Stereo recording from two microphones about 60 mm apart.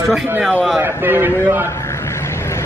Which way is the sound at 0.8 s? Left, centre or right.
Right.